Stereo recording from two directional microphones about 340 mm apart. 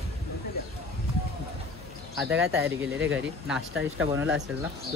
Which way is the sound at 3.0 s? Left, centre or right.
Right.